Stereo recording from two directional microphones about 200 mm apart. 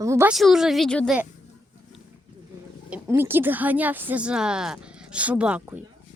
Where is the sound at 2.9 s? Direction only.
10° right (ahead or behind).